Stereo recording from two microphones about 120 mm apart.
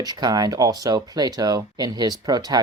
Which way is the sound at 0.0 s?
35° right (ahead or behind).